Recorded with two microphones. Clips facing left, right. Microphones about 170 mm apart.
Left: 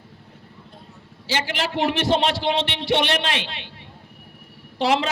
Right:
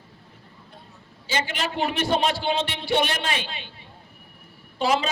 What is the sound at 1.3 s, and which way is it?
A man's voice, 70° left (ahead or behind).